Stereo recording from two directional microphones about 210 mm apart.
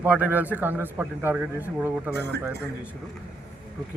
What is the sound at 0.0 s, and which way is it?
A man's voice, 10° right (ahead or behind).